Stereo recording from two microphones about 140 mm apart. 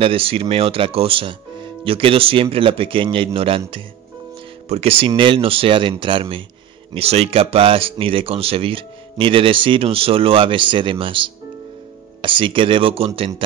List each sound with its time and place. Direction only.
0.0 s speech: 40° right (ahead or behind)
4.6 s speech: 45° right (ahead or behind)